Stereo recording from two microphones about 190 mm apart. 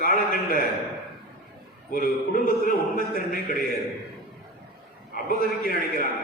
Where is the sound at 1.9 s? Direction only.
50° left (ahead or behind).